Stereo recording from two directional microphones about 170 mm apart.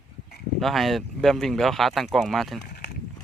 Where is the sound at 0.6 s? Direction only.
Centre (ahead or behind).